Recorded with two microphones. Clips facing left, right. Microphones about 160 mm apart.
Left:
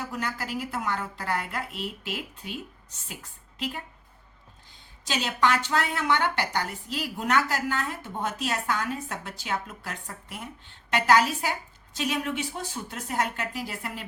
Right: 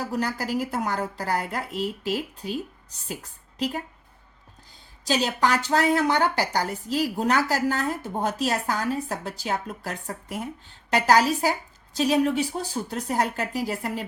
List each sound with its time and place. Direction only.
0.0 s speech: 35° right (ahead or behind)
5.0 s speech: 35° right (ahead or behind)